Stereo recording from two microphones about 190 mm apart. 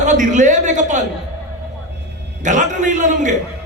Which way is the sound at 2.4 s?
40° right (ahead or behind).